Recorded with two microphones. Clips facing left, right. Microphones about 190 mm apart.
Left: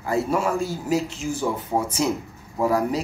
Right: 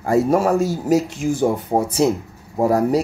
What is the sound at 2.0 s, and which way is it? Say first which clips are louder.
Speech: right 6 dB; 35° right (ahead or behind).